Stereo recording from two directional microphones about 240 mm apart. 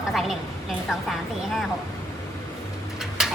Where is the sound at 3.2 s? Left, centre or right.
Centre.